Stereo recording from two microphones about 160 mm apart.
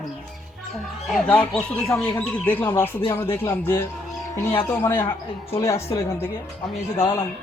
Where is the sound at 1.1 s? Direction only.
5° left (ahead or behind).